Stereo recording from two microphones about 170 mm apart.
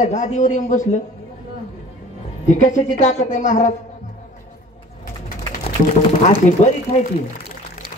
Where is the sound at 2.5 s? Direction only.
45° left (ahead or behind).